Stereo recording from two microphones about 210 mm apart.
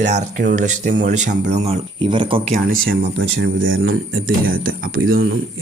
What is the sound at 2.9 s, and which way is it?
Speech, 60° right (ahead or behind).